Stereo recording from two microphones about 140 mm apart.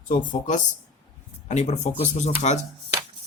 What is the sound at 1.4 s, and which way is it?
Speech, 55° left (ahead or behind).